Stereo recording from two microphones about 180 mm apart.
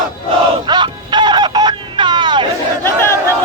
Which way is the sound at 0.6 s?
25° right (ahead or behind).